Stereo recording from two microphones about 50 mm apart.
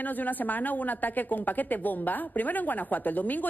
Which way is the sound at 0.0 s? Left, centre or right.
Left.